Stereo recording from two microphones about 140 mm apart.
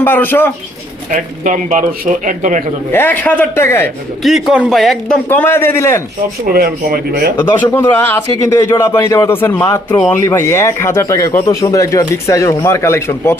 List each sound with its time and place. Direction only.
0.0 s speech: 15° left (ahead or behind)
1.1 s a man's voice: 70° right (ahead or behind)
2.9 s speech: 15° left (ahead or behind)
4.2 s a man's voice: centre (ahead or behind); by 6.0 s 15° left (ahead or behind)
6.4 s speech: 90° right
7.3 s speech: 15° left (ahead or behind)